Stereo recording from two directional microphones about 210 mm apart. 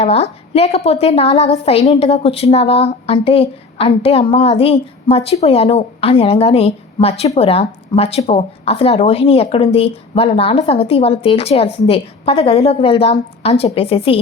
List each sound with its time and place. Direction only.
0.0 s speech: 30° left (ahead or behind)